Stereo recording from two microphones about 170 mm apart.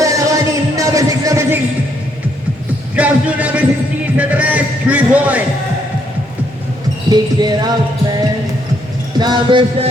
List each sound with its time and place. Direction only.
0.0 s music: 20° right (ahead or behind)
2.9 s music: 10° right (ahead or behind)
4.2 s a sound: 10° right (ahead or behind)
7.1 s speech: 25° right (ahead or behind)
9.1 s speech: 25° right (ahead or behind)